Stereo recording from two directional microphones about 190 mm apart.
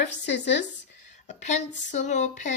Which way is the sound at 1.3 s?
40° left (ahead or behind).